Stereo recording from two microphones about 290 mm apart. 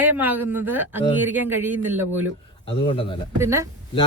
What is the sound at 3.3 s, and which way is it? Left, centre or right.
Speech, centre.